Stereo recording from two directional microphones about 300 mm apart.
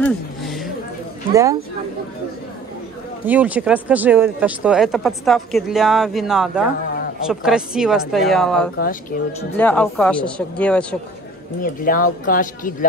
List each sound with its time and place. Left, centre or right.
0.0 s a sound: centre
1.3 s speech: centre
3.3 s speech: centre
9.1 s speech: left
9.6 s speech: centre
11.8 s speech: left